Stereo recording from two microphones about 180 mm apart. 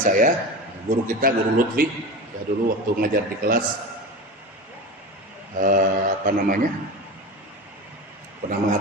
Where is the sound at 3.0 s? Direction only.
55° right (ahead or behind).